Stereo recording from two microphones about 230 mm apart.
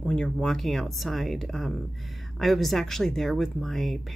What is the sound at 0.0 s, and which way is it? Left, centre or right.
Speech, centre.